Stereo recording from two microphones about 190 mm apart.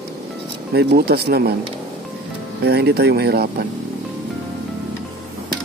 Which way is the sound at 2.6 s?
60° right (ahead or behind).